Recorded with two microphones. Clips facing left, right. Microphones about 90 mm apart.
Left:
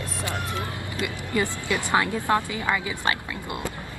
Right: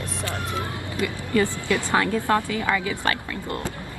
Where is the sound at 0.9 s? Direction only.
20° left (ahead or behind).